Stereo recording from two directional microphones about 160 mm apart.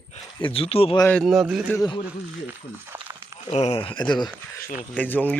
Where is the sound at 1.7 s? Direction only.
25° left (ahead or behind).